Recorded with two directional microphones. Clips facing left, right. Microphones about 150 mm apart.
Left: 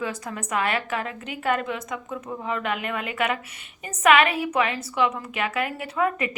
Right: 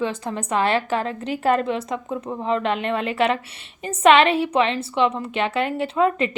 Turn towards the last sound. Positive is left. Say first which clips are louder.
# right 5 dB
turn(degrees=-25)  # may be behind; listen again after turning